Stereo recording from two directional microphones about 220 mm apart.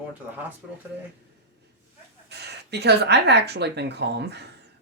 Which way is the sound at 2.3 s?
50° right (ahead or behind).